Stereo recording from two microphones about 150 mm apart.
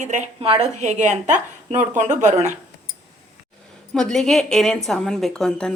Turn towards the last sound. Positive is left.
turn(degrees=5)  # may be behind; listen again after turning